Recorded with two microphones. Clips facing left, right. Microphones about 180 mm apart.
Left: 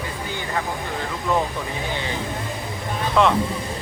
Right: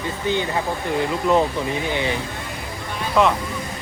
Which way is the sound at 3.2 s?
5° right (ahead or behind).